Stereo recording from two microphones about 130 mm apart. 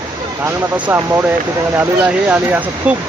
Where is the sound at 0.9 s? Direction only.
20° right (ahead or behind).